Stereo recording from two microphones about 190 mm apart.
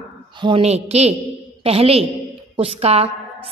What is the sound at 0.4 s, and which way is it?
A woman's voice, 30° right (ahead or behind).